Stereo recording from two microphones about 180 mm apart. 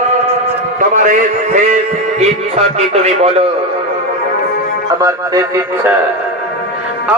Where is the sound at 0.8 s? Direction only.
45° right (ahead or behind).